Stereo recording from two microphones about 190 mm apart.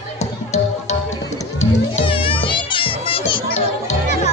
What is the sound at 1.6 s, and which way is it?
Music, 30° left (ahead or behind).